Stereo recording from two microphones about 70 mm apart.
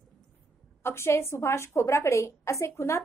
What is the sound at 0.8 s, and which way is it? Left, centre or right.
A woman's voice, left.